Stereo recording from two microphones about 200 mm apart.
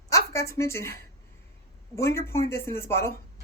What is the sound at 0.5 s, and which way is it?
Speech, 15° left (ahead or behind).